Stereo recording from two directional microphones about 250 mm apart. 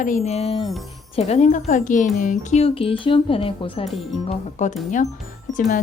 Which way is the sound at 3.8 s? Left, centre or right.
Centre.